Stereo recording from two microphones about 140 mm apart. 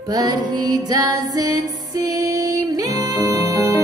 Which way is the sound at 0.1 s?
30° right (ahead or behind).